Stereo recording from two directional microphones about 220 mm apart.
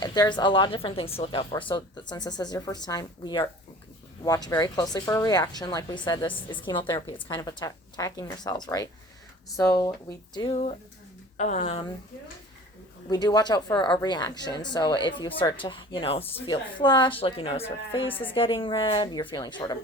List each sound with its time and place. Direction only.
0.0 s speech: 20° left (ahead or behind)
13.1 s speech: 20° left (ahead or behind)
18.1 s speech: 10° left (ahead or behind)
18.3 s speech: 25° left (ahead or behind)